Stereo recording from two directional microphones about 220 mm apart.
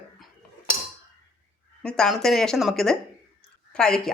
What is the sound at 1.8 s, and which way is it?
Speech, 5° left (ahead or behind).